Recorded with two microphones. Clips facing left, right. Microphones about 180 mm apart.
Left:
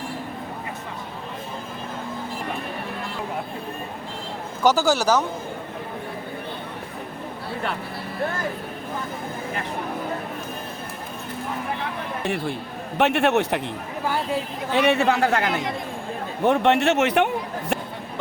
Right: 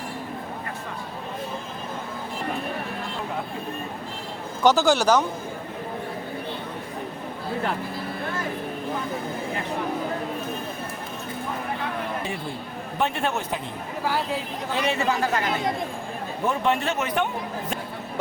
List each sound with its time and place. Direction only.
4.6 s a man's voice: 10° left (ahead or behind)
13.0 s a man's voice: 75° left (ahead or behind)
14.7 s a man's voice: 70° left (ahead or behind)